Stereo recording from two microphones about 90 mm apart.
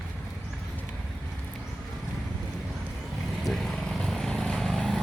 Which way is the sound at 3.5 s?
5° left (ahead or behind).